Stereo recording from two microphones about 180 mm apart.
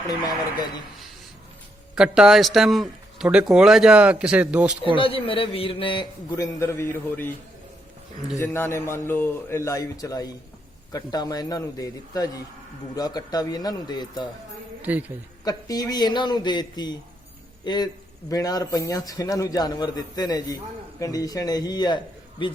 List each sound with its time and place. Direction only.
0.1 s a man's voice: 20° left (ahead or behind)
2.0 s a man's voice: 5° right (ahead or behind)
4.9 s a man's voice: 30° left (ahead or behind); by 7.3 s 10° left (ahead or behind)
8.4 s a man's voice: 15° left (ahead or behind)
14.8 s a woman's voice: 10° right (ahead or behind)
15.4 s a man's voice: 20° left (ahead or behind)